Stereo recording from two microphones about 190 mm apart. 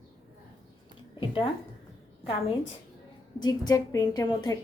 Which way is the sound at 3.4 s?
20° left (ahead or behind).